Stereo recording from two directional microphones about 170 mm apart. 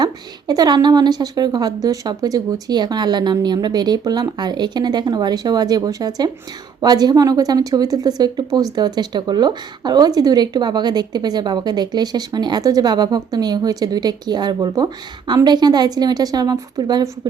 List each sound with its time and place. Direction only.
0.0 s speech: 25° right (ahead or behind)